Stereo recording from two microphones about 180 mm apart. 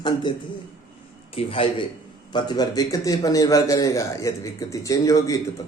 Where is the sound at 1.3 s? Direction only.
30° left (ahead or behind).